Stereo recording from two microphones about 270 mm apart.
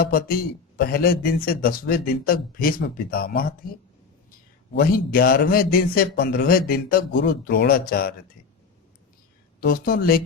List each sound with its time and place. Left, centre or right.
0.0 s a man's voice: left
9.6 s a man's voice: left